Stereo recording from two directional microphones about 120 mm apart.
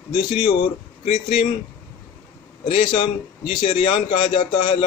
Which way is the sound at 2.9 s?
50° left (ahead or behind).